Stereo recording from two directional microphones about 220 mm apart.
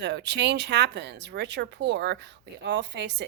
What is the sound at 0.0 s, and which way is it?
Speech, 50° right (ahead or behind).